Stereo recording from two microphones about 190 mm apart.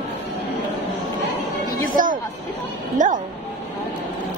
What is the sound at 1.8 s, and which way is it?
Speech, 45° right (ahead or behind).